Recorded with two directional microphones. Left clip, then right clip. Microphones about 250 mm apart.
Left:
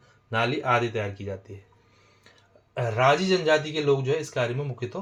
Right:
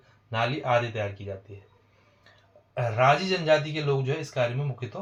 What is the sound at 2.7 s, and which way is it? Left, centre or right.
Speech, left.